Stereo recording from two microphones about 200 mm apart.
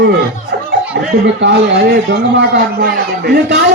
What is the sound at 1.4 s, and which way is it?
A man's voice, 65° right (ahead or behind).